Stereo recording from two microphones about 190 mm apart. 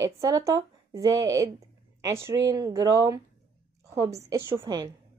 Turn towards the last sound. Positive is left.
turn(degrees=-15)  # may be behind; listen again after turning